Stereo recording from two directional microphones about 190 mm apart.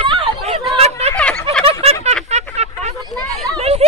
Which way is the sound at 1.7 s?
30° right (ahead or behind).